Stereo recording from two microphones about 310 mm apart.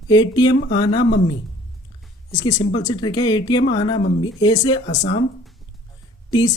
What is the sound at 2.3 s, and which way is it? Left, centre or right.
Speech, centre.